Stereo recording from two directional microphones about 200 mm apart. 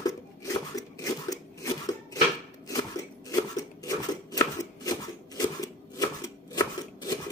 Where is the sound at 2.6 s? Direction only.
15° left (ahead or behind).